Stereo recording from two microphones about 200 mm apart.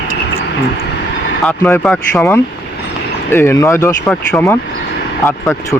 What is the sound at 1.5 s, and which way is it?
Speech, 10° left (ahead or behind).